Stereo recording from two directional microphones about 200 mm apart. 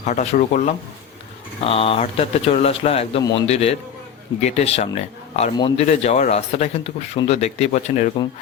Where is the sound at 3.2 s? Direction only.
20° left (ahead or behind).